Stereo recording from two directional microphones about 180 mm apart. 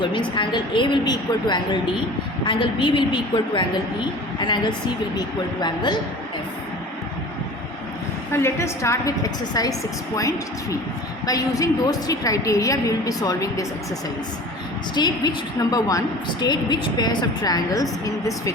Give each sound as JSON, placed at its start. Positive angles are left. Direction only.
{"t": 0.0, "sound": "a woman's voice", "side_deg": 25}
{"t": 8.3, "sound": "a woman's voice", "side_deg": 15}
{"t": 14.9, "sound": "a woman's voice", "side_deg": 25}